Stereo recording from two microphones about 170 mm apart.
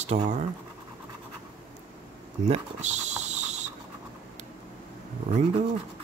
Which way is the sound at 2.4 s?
40° right (ahead or behind).